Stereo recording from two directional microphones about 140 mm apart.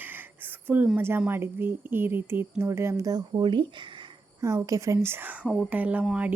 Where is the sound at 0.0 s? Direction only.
15° right (ahead or behind); by 3.8 s 35° right (ahead or behind).